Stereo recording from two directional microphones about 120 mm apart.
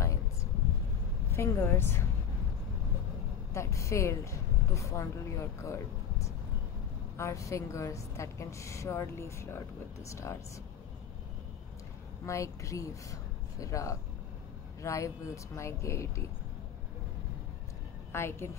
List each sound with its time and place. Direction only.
0.0 s a sound: 25° left (ahead or behind)
1.3 s a woman's voice: 20° left (ahead or behind)
3.5 s a woman's voice: 25° left (ahead or behind)
12.3 s a woman's voice: 25° left (ahead or behind)
18.1 s a woman's voice: 20° left (ahead or behind)